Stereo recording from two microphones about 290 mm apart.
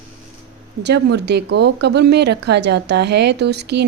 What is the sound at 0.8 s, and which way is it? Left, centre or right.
Speech, right.